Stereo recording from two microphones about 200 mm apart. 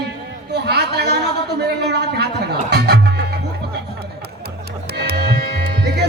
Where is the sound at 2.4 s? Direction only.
55° right (ahead or behind).